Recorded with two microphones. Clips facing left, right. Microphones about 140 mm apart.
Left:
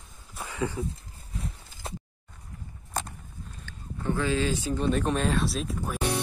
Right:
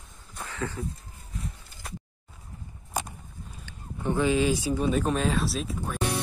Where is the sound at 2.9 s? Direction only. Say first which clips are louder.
Right 1 dB; 10° right (ahead or behind).